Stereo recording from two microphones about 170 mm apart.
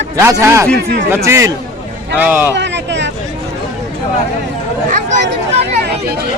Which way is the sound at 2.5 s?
90° right.